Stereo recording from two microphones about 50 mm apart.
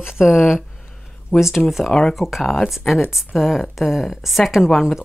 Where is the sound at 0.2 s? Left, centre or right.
Centre.